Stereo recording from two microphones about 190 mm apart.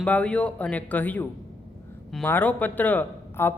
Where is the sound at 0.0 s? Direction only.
5° left (ahead or behind).